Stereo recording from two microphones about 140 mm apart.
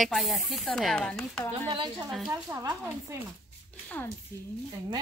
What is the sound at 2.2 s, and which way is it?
Speech, 25° right (ahead or behind).